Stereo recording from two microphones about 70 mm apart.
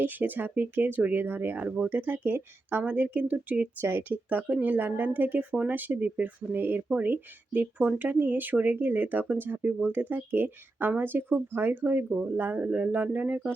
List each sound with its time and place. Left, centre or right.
0.0 s speech: right
4.3 s speech: centre